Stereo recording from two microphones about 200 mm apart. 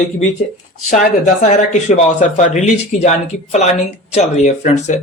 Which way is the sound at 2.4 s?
35° left (ahead or behind).